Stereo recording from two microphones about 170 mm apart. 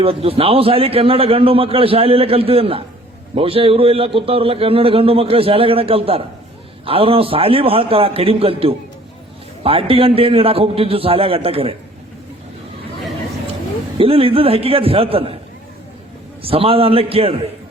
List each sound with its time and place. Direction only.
0.0 s a man's voice: 35° right (ahead or behind)
14.0 s a man's voice: 35° right (ahead or behind)
16.4 s a man's voice: 35° right (ahead or behind)